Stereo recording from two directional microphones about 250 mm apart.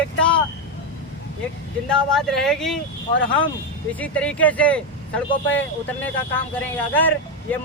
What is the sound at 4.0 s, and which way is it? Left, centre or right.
Speech, centre.